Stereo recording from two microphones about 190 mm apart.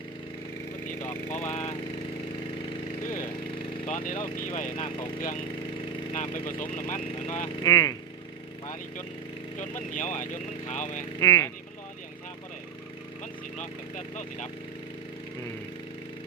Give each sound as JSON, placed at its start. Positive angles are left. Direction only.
{"t": 0.9, "sound": "a sound", "side_deg": 10}
{"t": 1.3, "sound": "speech", "side_deg": 35}
{"t": 2.6, "sound": "a sound", "side_deg": 30}
{"t": 3.0, "sound": "a sound", "side_deg": 45}
{"t": 3.8, "sound": "speech", "side_deg": 45}
{"t": 4.7, "sound": "speech", "side_deg": 30}
{"t": 6.1, "sound": "speech", "side_deg": 40}
{"t": 7.6, "sound": "speech", "side_deg": 20}
{"t": 9.6, "sound": "speech", "side_deg": 40}
{"t": 11.2, "sound": "speech", "side_deg": 15}
{"t": 13.6, "sound": "speech", "side_deg": 40}